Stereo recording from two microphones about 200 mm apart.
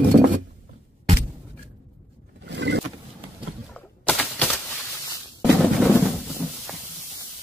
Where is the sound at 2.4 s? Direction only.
60° right (ahead or behind).